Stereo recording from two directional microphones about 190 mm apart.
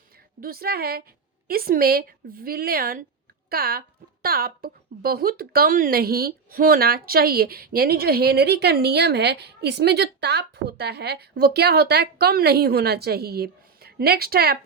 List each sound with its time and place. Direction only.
0.3 s a woman's voice: 50° right (ahead or behind)